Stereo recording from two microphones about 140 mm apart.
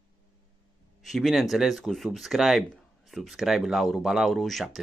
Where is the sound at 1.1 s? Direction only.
Centre (ahead or behind).